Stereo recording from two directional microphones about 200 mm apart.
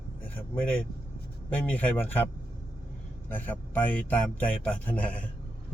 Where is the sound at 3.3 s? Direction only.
10° left (ahead or behind).